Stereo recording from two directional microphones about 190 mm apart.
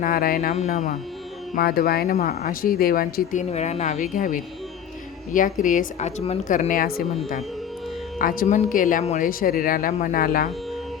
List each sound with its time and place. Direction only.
0.0 s speech: 50° left (ahead or behind)
1.5 s speech: 50° left (ahead or behind)
3.5 s speech: 35° left (ahead or behind)
8.2 s speech: 45° left (ahead or behind)